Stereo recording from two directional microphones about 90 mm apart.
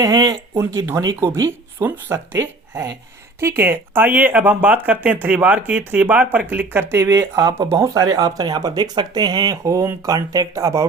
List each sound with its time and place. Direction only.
0.0 s speech: 45° right (ahead or behind)
0.9 s speech: 30° right (ahead or behind)
6.9 s speech: 30° right (ahead or behind)